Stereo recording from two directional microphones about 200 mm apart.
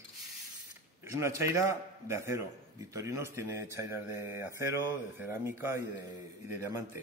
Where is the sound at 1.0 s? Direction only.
15° right (ahead or behind).